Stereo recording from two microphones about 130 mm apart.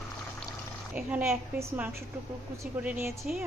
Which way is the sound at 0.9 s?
10° right (ahead or behind).